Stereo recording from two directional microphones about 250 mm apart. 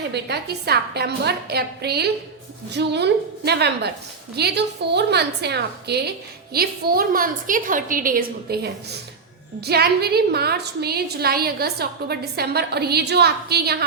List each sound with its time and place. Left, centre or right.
0.1 s a woman's voice: right